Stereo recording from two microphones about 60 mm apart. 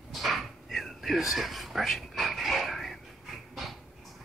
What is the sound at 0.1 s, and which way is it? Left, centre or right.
Whispering, centre.